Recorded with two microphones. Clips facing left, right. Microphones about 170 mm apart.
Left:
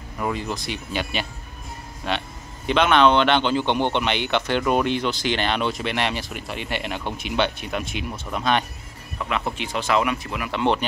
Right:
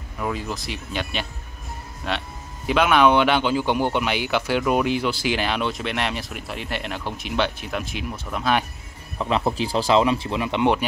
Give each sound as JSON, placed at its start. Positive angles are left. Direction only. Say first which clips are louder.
{"t": 0.2, "sound": "speech", "louder": "left 1 dB", "side_deg": 0}
{"t": 9.2, "sound": "speech", "louder": "right 4 dB", "side_deg": -30}
{"t": 10.6, "sound": "speech", "louder": "right 1 dB", "side_deg": -10}